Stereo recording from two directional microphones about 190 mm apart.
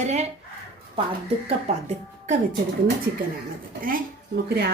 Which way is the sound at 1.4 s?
35° right (ahead or behind).